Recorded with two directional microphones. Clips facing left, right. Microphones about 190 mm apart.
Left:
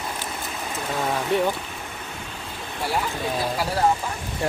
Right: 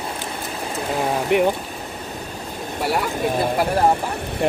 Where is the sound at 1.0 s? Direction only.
20° right (ahead or behind).